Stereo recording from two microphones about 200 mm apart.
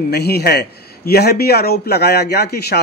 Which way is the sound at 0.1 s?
50° left (ahead or behind).